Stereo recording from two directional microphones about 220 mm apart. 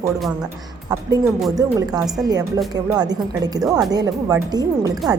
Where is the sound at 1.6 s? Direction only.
15° right (ahead or behind).